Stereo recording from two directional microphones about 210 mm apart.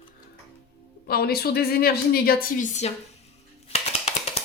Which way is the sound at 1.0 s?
50° left (ahead or behind).